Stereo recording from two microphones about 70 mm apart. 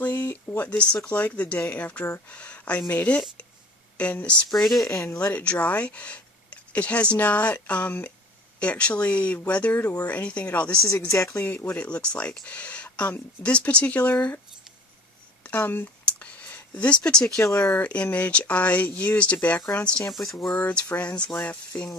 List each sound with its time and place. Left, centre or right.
0.0 s a sound: left
1.0 s speech: centre
4.6 s speech: centre
5.2 s speech: centre
11.1 s speech: left
11.5 s speech: centre
15.4 s speech: left
16.1 s a sound: centre
16.7 s speech: centre
20.1 s speech: centre
20.5 s speech: left